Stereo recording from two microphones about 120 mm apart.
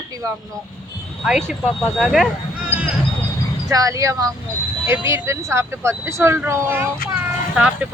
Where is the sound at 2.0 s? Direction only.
Centre (ahead or behind).